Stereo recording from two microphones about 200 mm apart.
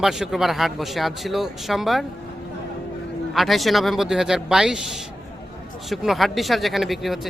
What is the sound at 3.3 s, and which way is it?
Speech, centre (ahead or behind).